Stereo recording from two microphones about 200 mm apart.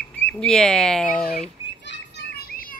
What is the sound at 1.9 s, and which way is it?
Children playing, 50° left (ahead or behind).